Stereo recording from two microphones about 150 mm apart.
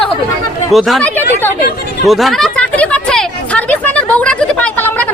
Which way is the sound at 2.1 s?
Centre (ahead or behind).